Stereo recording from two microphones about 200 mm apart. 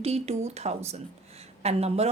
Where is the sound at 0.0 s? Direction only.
30° right (ahead or behind).